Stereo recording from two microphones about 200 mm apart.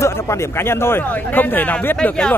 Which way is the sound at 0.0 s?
15° left (ahead or behind).